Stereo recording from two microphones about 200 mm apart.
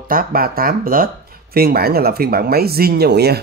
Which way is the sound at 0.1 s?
45° right (ahead or behind).